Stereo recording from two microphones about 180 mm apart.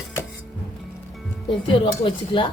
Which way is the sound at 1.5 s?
30° left (ahead or behind).